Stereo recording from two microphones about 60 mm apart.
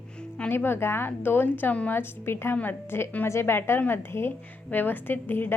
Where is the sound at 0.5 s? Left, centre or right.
Left.